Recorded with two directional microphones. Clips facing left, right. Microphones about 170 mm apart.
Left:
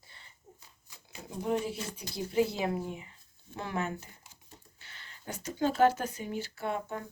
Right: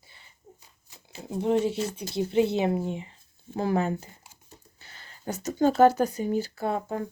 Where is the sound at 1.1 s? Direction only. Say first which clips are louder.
Right 7 dB; 25° right (ahead or behind).